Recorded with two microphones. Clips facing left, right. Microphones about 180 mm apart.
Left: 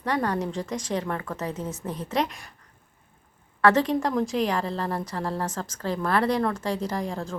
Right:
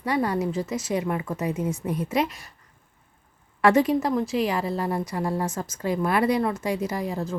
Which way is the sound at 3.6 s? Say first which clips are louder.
Right 2 dB; 20° right (ahead or behind).